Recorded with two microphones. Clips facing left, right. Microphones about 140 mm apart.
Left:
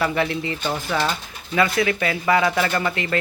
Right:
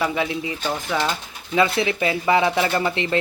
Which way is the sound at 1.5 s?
25° right (ahead or behind).